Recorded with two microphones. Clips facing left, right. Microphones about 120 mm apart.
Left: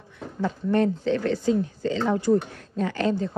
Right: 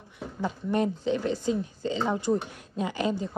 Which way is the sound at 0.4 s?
15° right (ahead or behind).